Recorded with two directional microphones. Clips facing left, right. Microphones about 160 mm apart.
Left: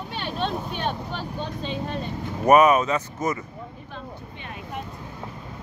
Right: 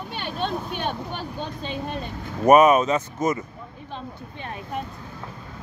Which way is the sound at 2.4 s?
25° right (ahead or behind).